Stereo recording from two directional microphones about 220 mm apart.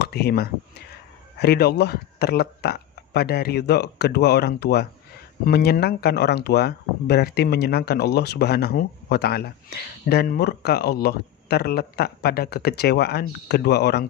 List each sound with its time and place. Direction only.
0.0 s speech: 45° left (ahead or behind)